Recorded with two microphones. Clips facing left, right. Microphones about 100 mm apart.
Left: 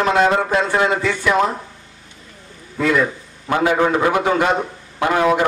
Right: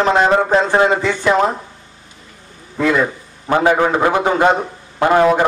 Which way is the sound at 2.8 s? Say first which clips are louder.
Right 2 dB; 30° right (ahead or behind).